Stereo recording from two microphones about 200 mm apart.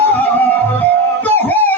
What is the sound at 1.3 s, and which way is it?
Music, 10° left (ahead or behind).